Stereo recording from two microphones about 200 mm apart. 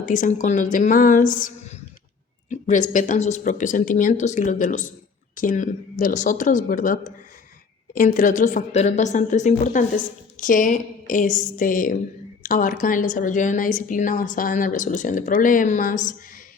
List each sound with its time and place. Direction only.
0.0 s a woman's voice: 40° left (ahead or behind)
2.5 s a woman's voice: 40° left (ahead or behind)